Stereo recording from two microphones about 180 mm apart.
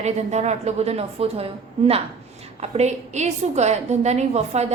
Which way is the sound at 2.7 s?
40° right (ahead or behind).